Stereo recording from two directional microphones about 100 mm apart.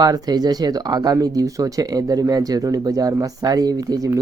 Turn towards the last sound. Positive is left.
turn(degrees=-40)  # may be behind; listen again after turning